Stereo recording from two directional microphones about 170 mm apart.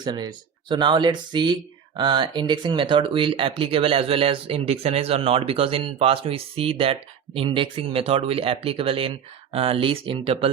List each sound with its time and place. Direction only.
0.0 s speech: 25° right (ahead or behind)